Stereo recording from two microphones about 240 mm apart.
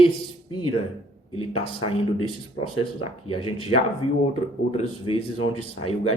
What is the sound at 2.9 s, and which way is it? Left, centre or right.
Speech, left.